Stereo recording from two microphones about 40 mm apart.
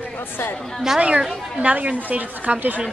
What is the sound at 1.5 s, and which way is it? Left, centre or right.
A woman's voice, right.